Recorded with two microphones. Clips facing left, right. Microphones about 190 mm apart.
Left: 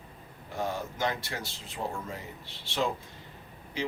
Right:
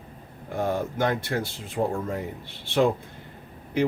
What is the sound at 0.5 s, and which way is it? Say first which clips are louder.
Speech: right 7 dB; 55° right (ahead or behind).